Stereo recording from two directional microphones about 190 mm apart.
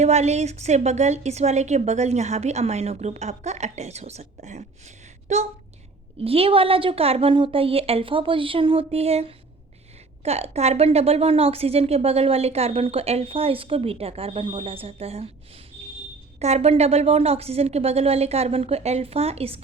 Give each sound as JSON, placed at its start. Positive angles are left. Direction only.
{"t": 0.0, "sound": "a woman's voice", "side_deg": -35}
{"t": 16.4, "sound": "a woman's voice", "side_deg": -35}